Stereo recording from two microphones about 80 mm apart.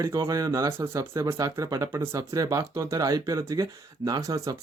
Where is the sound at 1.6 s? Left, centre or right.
Right.